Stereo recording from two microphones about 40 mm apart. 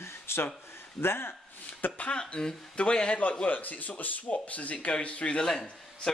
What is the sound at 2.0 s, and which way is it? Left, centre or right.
Speech, left.